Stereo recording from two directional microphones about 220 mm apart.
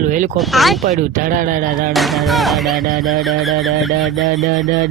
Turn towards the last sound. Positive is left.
turn(degrees=0)  # may be behind; listen again after turning